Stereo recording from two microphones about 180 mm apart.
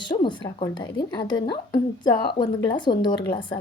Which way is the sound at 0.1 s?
25° left (ahead or behind).